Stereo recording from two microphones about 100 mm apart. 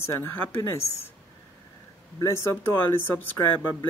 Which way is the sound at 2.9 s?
20° left (ahead or behind).